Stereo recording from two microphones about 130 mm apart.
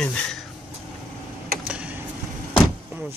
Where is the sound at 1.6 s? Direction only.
10° right (ahead or behind).